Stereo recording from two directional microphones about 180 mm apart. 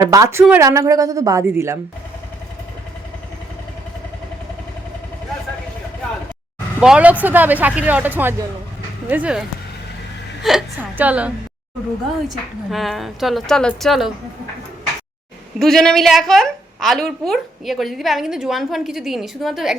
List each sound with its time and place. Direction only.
0.0 s speech: 20° right (ahead or behind)
6.7 s speech: 5° right (ahead or behind)
10.4 s speech: 5° right (ahead or behind)
12.7 s a woman's voice: centre (ahead or behind)
15.5 s a woman's voice: centre (ahead or behind)